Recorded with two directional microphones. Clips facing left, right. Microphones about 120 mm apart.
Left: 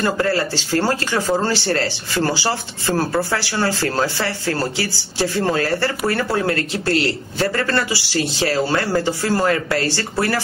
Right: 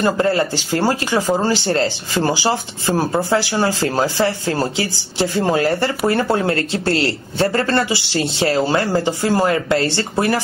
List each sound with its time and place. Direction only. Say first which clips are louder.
0.0 s speech: right 3 dB; 20° right (ahead or behind)